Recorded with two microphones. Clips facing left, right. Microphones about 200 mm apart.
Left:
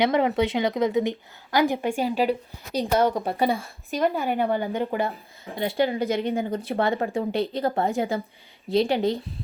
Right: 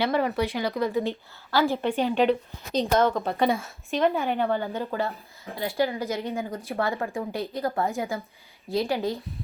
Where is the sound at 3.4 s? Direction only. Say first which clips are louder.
Even; centre (ahead or behind).